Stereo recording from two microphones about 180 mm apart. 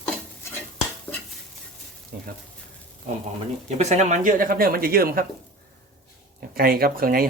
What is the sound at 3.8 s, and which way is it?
Speech, 40° right (ahead or behind).